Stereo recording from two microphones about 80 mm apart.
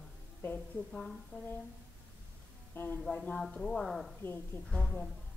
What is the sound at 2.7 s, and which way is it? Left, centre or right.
Speech, left.